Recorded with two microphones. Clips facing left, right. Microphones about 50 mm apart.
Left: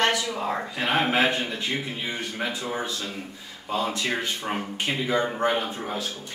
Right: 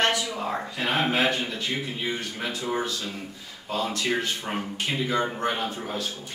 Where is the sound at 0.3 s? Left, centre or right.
Centre.